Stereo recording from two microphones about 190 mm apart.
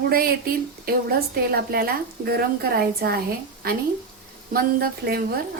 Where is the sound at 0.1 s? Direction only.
50° right (ahead or behind).